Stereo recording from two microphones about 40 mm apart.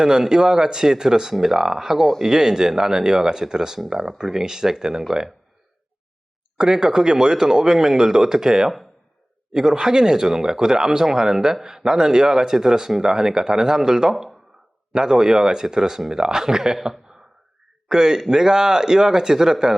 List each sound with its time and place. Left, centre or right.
0.0 s speech: centre
6.6 s speech: centre
16.7 s a man's voice: centre
17.8 s speech: centre